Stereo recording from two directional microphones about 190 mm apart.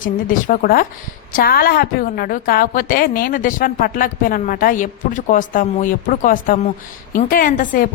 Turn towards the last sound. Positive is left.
turn(degrees=45)  # may be behind; listen again after turning